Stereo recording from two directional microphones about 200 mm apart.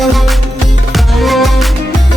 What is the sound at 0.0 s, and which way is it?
Music, centre (ahead or behind).